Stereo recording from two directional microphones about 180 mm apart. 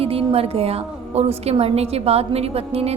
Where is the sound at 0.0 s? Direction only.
35° right (ahead or behind).